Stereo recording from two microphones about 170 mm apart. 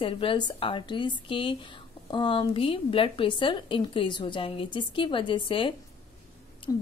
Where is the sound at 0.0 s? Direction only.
30° left (ahead or behind).